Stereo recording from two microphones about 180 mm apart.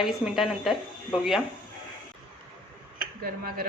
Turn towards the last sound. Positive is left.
turn(degrees=-55)  # may be behind; listen again after turning